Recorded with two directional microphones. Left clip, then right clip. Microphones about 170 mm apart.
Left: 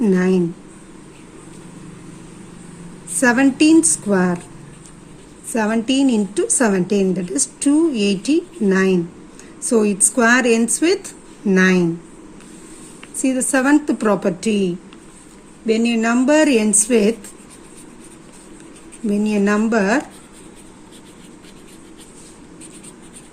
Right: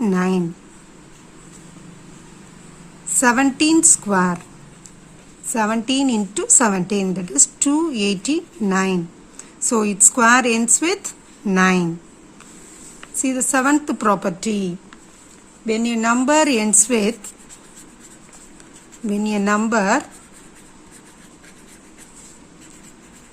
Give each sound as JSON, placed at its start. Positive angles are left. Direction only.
{"t": 0.0, "sound": "a sound", "side_deg": -50}
{"t": 3.1, "sound": "a woman's voice", "side_deg": -50}
{"t": 5.5, "sound": "a woman's voice", "side_deg": -50}
{"t": 13.0, "sound": "a woman's voice", "side_deg": -50}
{"t": 19.0, "sound": "a woman's voice", "side_deg": -50}